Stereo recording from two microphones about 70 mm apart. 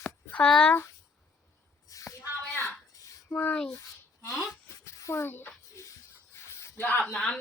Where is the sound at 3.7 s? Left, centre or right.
Left.